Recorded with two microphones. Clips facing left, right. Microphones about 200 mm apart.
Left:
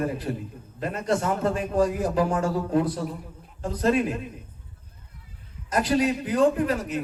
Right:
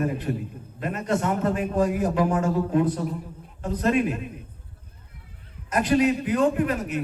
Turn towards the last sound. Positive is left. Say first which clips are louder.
# even
turn(degrees=30)  # may be behind; listen again after turning